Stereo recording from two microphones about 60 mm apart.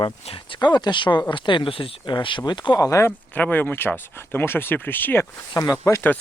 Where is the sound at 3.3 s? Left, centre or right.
Left.